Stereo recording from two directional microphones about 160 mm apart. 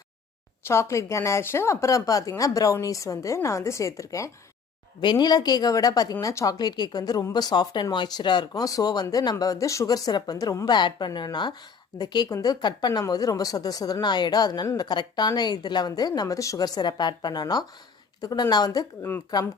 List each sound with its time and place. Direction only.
0.6 s a woman's voice: 15° left (ahead or behind)